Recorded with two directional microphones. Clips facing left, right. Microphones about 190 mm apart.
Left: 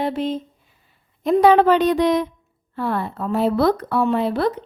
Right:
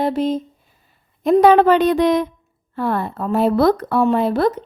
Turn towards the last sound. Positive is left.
turn(degrees=-45)  # may be behind; listen again after turning